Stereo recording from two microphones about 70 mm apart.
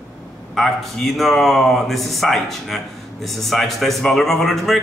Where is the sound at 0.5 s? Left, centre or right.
Centre.